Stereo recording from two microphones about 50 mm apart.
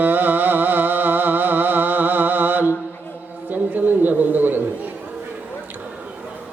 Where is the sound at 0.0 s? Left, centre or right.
Right.